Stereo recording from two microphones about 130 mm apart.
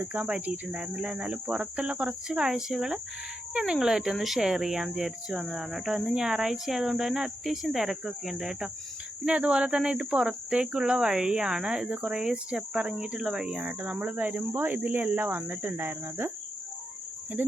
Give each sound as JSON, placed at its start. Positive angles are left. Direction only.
{"t": 0.0, "sound": "speech", "side_deg": -15}